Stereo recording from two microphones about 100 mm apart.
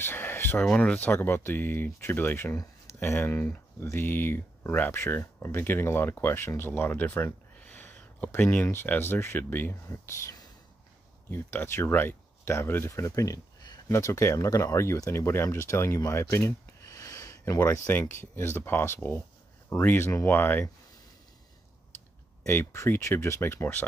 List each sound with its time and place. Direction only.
0.0 s a sound: 20° left (ahead or behind)
0.6 s speech: 10° left (ahead or behind); by 17.6 s 35° left (ahead or behind)
17.6 s speech: 25° left (ahead or behind)
22.4 s speech: 25° left (ahead or behind)